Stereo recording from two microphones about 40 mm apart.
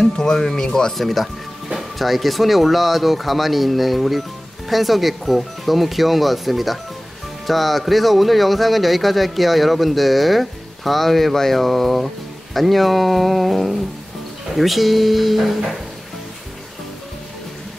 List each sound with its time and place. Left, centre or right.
0.0 s speech: centre
0.9 s speech: centre